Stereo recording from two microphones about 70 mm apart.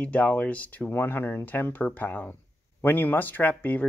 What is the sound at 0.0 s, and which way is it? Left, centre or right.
Speech, left.